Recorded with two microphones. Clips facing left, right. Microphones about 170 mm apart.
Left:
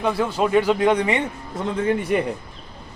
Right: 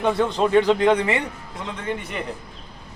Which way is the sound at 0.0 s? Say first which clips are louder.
Right 1 dB; centre (ahead or behind).